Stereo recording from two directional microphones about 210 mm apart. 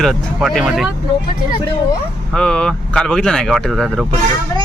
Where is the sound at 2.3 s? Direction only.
5° left (ahead or behind).